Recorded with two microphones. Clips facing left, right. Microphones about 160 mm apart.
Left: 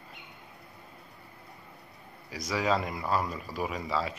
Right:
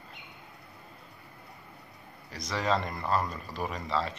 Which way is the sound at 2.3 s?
5° left (ahead or behind).